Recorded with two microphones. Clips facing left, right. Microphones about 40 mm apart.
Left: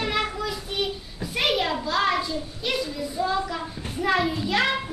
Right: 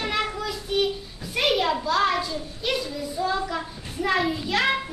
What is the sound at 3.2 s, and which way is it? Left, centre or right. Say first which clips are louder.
Child singing: even; centre.